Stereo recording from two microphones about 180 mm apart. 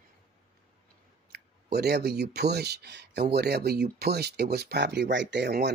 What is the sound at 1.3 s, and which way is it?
Speech, 65° right (ahead or behind).